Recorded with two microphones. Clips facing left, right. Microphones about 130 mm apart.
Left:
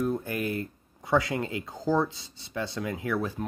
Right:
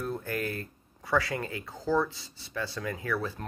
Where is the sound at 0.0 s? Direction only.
15° left (ahead or behind).